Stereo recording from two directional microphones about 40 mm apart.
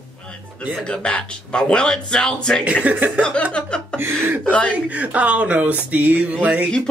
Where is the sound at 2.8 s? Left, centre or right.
Right.